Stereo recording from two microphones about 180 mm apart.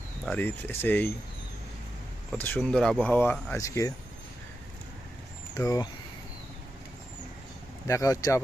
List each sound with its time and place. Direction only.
0.3 s speech: 10° left (ahead or behind)
2.3 s speech: 10° left (ahead or behind)
5.5 s speech: 20° left (ahead or behind)
7.9 s speech: 20° left (ahead or behind)